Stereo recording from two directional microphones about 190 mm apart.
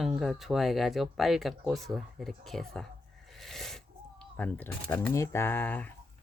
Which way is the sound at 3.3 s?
Centre (ahead or behind).